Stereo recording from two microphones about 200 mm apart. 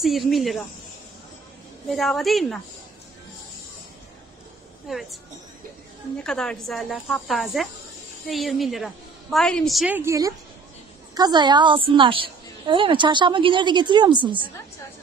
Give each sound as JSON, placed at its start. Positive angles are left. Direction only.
{"t": 0.0, "sound": "a woman's voice", "side_deg": 0}
{"t": 1.9, "sound": "a woman's voice", "side_deg": 0}
{"t": 4.8, "sound": "a woman's voice", "side_deg": 0}